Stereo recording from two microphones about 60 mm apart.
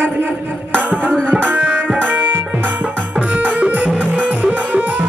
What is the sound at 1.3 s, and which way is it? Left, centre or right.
Music, right.